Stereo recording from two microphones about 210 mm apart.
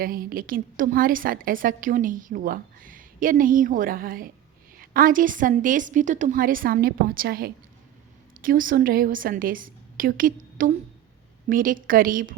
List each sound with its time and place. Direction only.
0.0 s a woman's voice: 45° right (ahead or behind)